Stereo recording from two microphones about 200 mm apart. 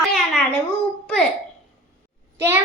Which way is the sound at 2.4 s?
10° right (ahead or behind).